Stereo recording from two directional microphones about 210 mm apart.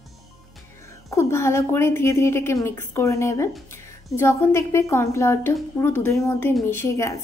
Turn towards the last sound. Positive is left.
turn(degrees=15)  # may be behind; listen again after turning